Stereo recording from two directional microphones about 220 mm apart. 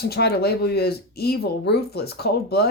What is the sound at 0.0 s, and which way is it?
Speech, 45° left (ahead or behind).